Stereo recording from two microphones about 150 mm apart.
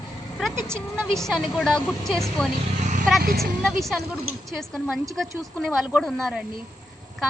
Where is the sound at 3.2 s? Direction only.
85° right.